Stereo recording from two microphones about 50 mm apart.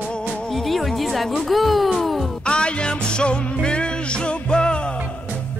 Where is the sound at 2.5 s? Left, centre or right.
Centre.